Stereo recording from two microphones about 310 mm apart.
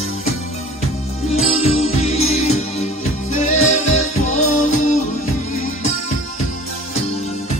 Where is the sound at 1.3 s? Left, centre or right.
Centre.